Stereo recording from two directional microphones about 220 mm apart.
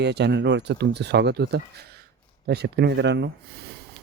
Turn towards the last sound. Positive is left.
turn(degrees=-50)  # may be behind; listen again after turning